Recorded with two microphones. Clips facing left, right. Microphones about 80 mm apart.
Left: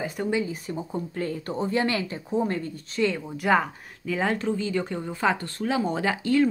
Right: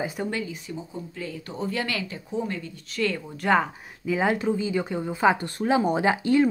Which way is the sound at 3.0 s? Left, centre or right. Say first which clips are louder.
Left 2 dB; left.